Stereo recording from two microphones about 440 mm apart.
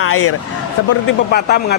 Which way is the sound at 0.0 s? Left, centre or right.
Left.